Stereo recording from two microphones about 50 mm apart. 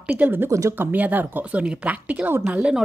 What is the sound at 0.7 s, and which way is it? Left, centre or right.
Speech, right.